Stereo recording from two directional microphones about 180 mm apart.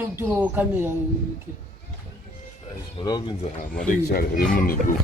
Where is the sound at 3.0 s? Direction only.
20° left (ahead or behind).